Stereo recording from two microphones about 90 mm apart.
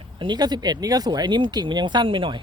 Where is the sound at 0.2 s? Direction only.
50° right (ahead or behind); by 2.4 s 70° right (ahead or behind).